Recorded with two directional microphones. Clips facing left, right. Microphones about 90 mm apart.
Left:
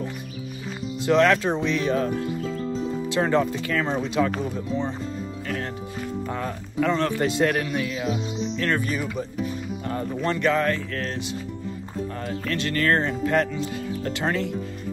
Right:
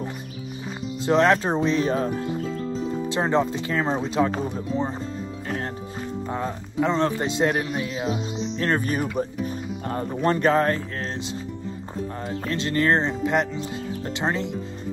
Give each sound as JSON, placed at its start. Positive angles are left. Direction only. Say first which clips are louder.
{"t": 1.0, "sound": "a man's voice", "louder": "even", "side_deg": -30}
{"t": 6.2, "sound": "a man's voice", "louder": "right 1 dB", "side_deg": -20}
{"t": 9.2, "sound": "speech", "louder": "right 4 dB", "side_deg": -55}
{"t": 9.8, "sound": "speech", "louder": "right 3 dB", "side_deg": -30}
{"t": 12.2, "sound": "a man's voice", "louder": "even", "side_deg": -25}